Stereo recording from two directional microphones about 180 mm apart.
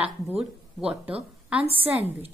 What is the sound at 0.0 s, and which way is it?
Speech, 5° right (ahead or behind).